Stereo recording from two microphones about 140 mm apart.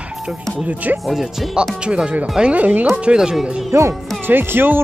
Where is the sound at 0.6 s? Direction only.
10° right (ahead or behind).